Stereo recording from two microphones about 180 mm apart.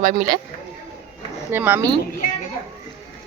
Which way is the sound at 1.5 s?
10° right (ahead or behind).